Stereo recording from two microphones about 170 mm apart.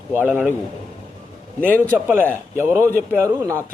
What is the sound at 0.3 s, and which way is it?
Speech, 10° right (ahead or behind).